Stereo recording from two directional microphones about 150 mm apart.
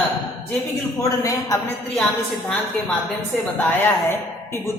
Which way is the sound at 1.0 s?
20° left (ahead or behind).